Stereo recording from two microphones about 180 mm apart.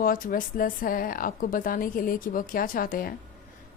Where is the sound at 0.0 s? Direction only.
50° left (ahead or behind).